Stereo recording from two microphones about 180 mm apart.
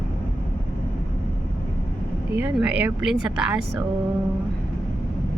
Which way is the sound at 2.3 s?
10° right (ahead or behind).